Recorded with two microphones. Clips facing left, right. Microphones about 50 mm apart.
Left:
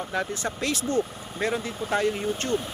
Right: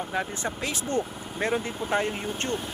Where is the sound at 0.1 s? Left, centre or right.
Centre.